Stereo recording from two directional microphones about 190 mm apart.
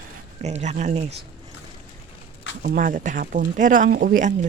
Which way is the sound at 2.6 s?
45° right (ahead or behind).